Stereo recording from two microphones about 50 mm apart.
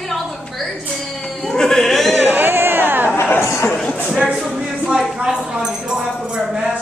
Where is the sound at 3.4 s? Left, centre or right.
Left.